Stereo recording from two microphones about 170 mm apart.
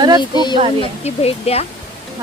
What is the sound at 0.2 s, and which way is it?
Speech, 25° left (ahead or behind).